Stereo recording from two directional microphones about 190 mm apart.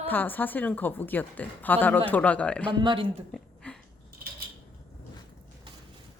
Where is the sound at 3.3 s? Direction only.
5° left (ahead or behind).